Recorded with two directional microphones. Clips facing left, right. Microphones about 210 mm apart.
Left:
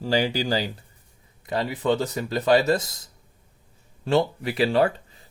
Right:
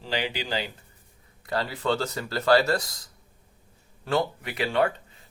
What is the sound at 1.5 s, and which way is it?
Speech, 20° left (ahead or behind).